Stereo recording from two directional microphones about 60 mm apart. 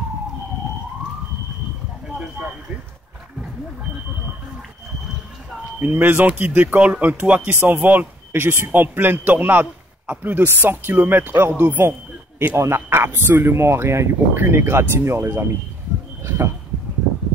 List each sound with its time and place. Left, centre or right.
5.8 s a man's voice: right
12.5 s speech: right
16.2 s a sound: right